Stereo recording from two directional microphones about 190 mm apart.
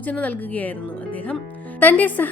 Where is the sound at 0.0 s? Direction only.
10° left (ahead or behind).